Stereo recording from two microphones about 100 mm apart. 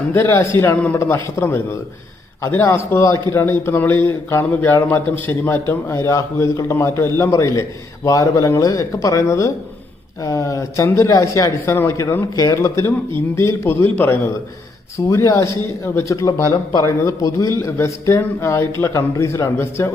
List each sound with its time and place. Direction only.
0.1 s a man's voice: 25° left (ahead or behind)